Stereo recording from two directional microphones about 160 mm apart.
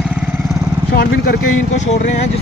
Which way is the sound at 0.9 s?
75° left (ahead or behind).